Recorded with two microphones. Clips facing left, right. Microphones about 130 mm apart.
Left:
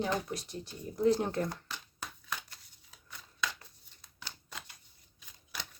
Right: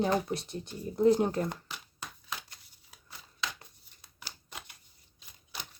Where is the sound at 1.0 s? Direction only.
15° right (ahead or behind).